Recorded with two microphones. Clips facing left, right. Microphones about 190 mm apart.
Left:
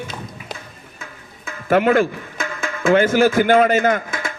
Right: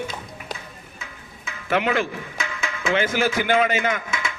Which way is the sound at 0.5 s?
55° left (ahead or behind).